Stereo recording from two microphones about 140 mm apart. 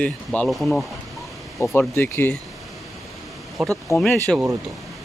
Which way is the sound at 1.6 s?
20° left (ahead or behind).